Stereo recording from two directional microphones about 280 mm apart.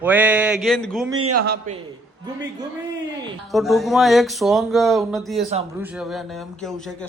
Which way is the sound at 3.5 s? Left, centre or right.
Centre.